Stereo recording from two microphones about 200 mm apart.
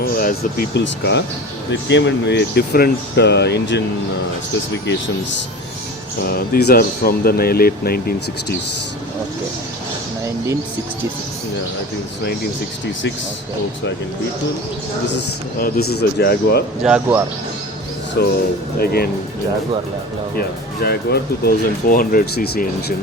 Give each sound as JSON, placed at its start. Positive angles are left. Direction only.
{"t": 0.0, "sound": "speech", "side_deg": 45}
{"t": 6.2, "sound": "speech", "side_deg": 50}
{"t": 15.5, "sound": "speech", "side_deg": 50}
{"t": 16.8, "sound": "speech", "side_deg": -5}
{"t": 18.2, "sound": "speech", "side_deg": 55}
{"t": 20.8, "sound": "speech", "side_deg": 50}